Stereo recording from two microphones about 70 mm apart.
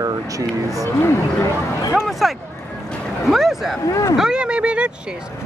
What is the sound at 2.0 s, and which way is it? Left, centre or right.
Speech, centre.